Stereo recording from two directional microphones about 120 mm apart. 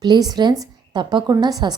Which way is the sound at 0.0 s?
35° right (ahead or behind).